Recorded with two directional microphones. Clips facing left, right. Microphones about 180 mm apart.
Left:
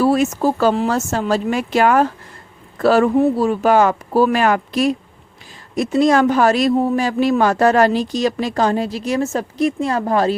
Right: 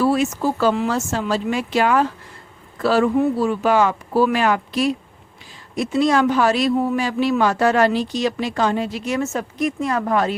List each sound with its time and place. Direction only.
0.0 s a man's voice: 40° left (ahead or behind)